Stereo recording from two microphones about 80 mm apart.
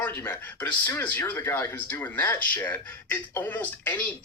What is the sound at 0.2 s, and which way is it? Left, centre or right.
Speech, left.